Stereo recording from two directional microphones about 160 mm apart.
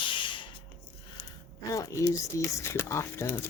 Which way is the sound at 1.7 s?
20° left (ahead or behind).